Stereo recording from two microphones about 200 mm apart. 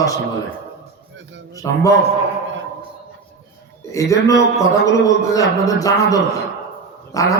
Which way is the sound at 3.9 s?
15° left (ahead or behind).